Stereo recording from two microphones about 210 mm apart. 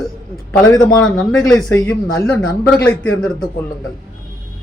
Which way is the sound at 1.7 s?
15° left (ahead or behind).